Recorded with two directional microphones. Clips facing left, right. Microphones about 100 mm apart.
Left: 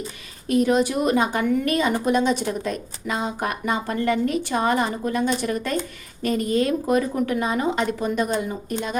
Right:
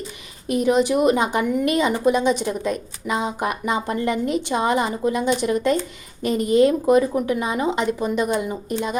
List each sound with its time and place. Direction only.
0.9 s speech: 15° right (ahead or behind)